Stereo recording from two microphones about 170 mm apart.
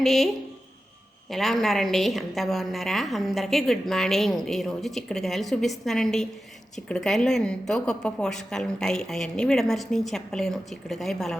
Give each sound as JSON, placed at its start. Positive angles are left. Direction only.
{"t": 0.0, "sound": "a woman's voice", "side_deg": 0}
{"t": 1.3, "sound": "a woman's voice", "side_deg": 0}